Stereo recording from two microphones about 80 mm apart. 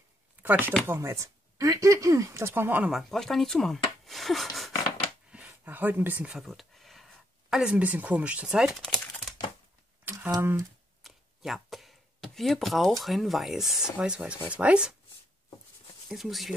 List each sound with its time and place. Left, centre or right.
0.4 s speech: right
0.8 s speech: right
2.9 s speech: centre
5.3 s speech: centre
6.3 s a sound: centre
7.7 s speech: centre
10.4 s speech: right
11.0 s a sound: centre
13.0 s speech: centre
16.1 s speech: centre